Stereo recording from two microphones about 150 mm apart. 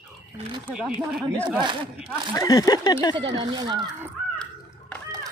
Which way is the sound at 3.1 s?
30° right (ahead or behind).